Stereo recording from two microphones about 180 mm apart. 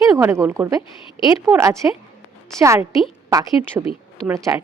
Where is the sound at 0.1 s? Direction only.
15° right (ahead or behind).